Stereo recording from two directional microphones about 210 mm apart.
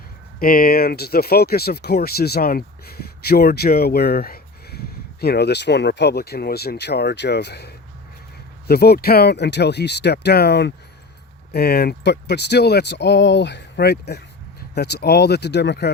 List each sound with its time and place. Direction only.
0.3 s speech: 45° left (ahead or behind)